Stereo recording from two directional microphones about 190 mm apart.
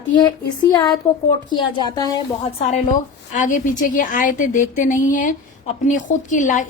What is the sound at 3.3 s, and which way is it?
A woman's voice, 45° left (ahead or behind).